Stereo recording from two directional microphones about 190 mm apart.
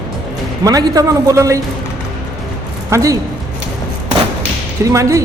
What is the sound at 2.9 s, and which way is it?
Speech, 15° right (ahead or behind).